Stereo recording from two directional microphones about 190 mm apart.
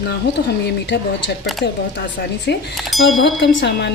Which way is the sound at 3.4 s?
60° left (ahead or behind).